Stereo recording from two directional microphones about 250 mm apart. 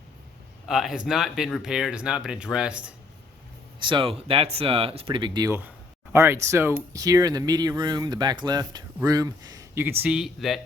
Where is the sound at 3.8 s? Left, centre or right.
Centre.